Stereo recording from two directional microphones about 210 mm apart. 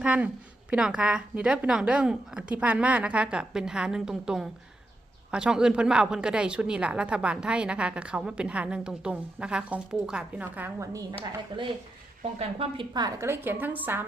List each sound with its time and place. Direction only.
0.0 s a woman's voice: 5° right (ahead or behind)
11.5 s a woman's voice: 20° right (ahead or behind)